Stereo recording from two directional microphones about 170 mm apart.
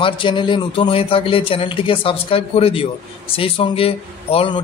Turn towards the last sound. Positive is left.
turn(degrees=30)  # may be behind; listen again after turning